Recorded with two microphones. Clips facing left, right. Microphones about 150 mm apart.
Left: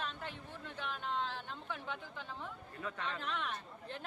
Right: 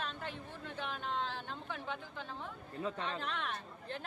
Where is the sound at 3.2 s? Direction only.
Centre (ahead or behind).